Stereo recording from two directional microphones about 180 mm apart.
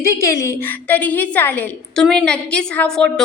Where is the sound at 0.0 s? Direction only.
15° left (ahead or behind).